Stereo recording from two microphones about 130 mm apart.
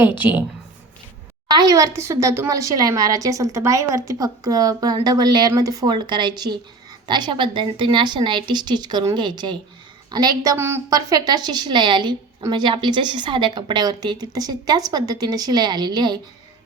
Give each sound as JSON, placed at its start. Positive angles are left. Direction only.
{"t": 0.2, "sound": "a woman's voice", "side_deg": -15}
{"t": 1.5, "sound": "a woman's voice", "side_deg": -30}
{"t": 10.6, "sound": "a woman's voice", "side_deg": -20}